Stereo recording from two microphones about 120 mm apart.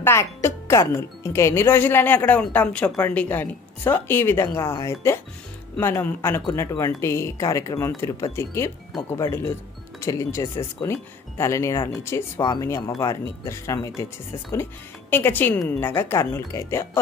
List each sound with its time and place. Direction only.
0.0 s speech: 20° left (ahead or behind)
12.4 s speech: 35° left (ahead or behind)
12.6 s speech: 25° left (ahead or behind)